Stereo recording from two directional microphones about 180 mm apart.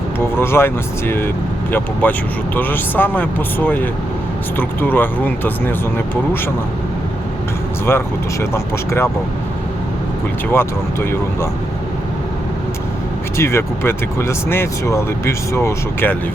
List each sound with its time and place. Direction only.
0.3 s speech: 15° left (ahead or behind)
7.9 s speech: 15° left (ahead or behind)
10.5 s speech: 15° left (ahead or behind)
13.3 s speech: 15° left (ahead or behind)